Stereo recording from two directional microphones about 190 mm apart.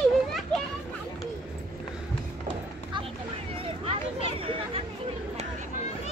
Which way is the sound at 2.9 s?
25° right (ahead or behind).